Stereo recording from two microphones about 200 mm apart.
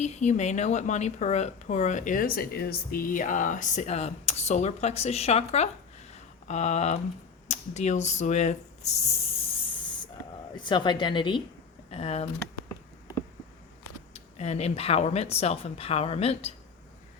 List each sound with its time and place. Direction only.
0.0 s a woman's voice: 35° left (ahead or behind)
6.1 s a sound: 35° left (ahead or behind)
10.5 s a woman's voice: 25° left (ahead or behind)
14.1 s a woman's voice: 30° left (ahead or behind)